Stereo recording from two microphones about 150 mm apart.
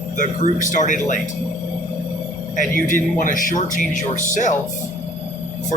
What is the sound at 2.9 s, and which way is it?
Speech, 60° left (ahead or behind).